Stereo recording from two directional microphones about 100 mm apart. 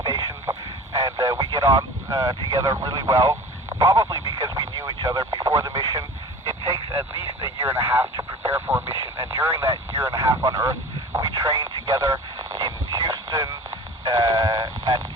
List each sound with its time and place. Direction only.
0.0 s a sound: 35° right (ahead or behind)
0.9 s speech: 35° right (ahead or behind)
3.8 s radio: 35° right (ahead or behind)
6.9 s speech: 30° right (ahead or behind)
14.0 s sheep: 35° right (ahead or behind)